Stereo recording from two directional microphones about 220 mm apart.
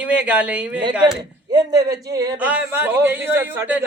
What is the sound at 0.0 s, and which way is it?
Speech, 5° right (ahead or behind).